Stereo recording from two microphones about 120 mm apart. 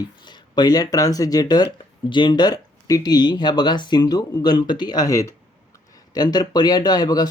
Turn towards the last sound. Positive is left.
turn(degrees=35)  # may be behind; listen again after turning